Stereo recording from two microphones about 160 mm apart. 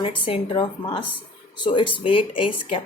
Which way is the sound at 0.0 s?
35° left (ahead or behind).